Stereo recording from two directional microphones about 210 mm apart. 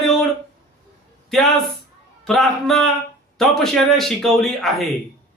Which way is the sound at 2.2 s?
Centre (ahead or behind).